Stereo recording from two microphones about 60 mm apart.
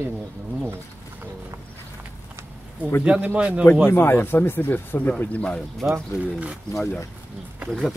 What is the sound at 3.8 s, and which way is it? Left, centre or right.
Speech, left.